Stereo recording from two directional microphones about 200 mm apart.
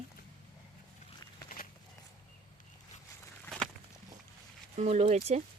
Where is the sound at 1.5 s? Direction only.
45° left (ahead or behind).